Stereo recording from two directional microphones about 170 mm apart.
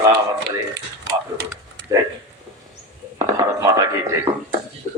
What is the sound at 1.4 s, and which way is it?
Speech, 70° right (ahead or behind).